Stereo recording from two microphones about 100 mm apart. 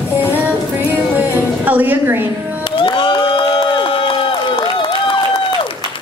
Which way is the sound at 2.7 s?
60° left (ahead or behind).